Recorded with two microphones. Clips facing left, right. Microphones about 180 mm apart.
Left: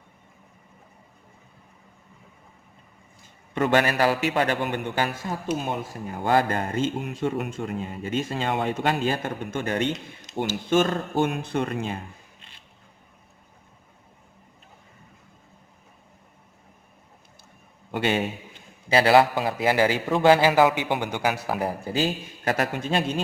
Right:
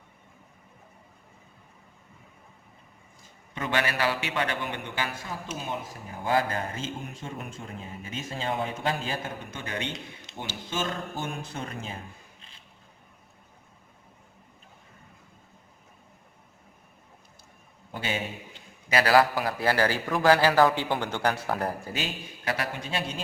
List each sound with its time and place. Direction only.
3.5 s a man's voice: 55° left (ahead or behind)
5.5 s speech: 60° left (ahead or behind)
17.9 s a man's voice: 65° left (ahead or behind)
18.9 s a man's voice: 25° left (ahead or behind); by 21.8 s 5° left (ahead or behind)
21.8 s a man's voice: 35° left (ahead or behind)